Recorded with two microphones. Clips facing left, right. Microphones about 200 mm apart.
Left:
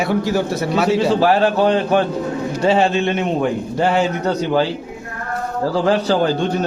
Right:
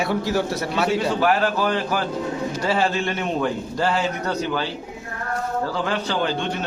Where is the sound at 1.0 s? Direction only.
30° left (ahead or behind).